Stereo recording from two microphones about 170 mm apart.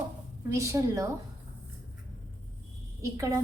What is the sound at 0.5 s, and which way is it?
Speech, 20° right (ahead or behind).